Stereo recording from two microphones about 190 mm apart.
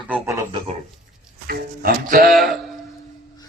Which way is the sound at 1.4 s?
50° right (ahead or behind).